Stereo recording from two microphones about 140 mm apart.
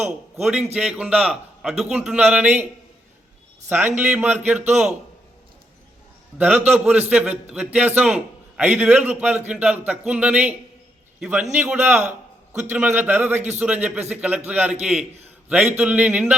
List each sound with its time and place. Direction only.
0.0 s a man's voice: 5° right (ahead or behind)
3.7 s a man's voice: 15° right (ahead or behind)
6.4 s a man's voice: 10° right (ahead or behind)